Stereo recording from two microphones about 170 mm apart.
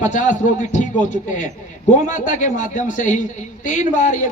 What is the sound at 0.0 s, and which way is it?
A man's voice, 45° left (ahead or behind).